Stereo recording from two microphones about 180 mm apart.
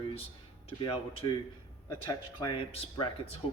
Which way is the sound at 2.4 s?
25° left (ahead or behind).